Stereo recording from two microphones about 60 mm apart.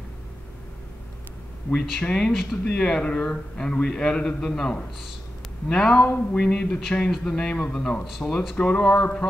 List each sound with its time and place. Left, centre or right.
1.7 s a man's voice: centre